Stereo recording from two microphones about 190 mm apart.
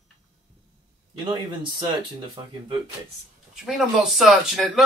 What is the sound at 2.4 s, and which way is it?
Speech, 25° right (ahead or behind).